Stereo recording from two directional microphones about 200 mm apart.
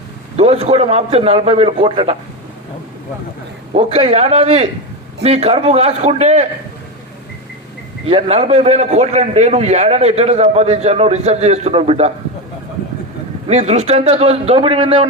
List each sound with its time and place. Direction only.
0.3 s a man's voice: 30° right (ahead or behind)
3.8 s a man's voice: 30° right (ahead or behind)
8.0 s a man's voice: 30° right (ahead or behind)
13.5 s a man's voice: 35° right (ahead or behind)